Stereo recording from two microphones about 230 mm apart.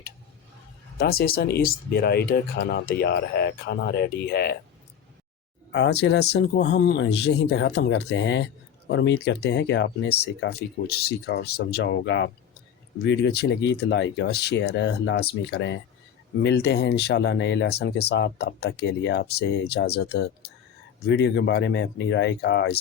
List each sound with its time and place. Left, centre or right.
0.9 s speech: left
5.7 s speech: left